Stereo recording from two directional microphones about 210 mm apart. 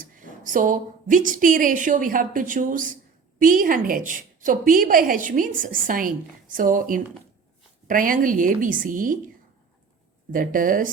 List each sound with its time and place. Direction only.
0.0 s a woman's voice: 40° right (ahead or behind)
10.3 s a woman's voice: 40° right (ahead or behind)